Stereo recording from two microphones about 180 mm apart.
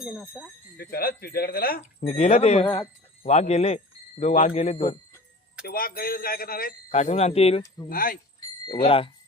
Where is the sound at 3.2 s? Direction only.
40° left (ahead or behind).